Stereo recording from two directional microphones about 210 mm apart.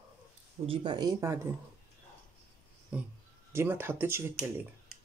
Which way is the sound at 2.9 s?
5° right (ahead or behind).